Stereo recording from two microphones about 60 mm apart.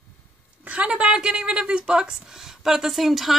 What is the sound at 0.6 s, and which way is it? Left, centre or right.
Speech, right.